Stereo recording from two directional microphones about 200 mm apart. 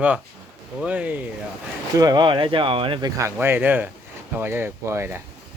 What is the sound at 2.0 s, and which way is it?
Speech, 20° right (ahead or behind).